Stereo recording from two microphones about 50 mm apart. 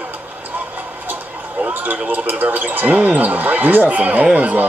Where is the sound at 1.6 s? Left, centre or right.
Right.